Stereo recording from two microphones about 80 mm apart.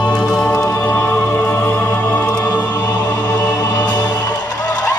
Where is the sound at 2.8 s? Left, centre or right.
Left.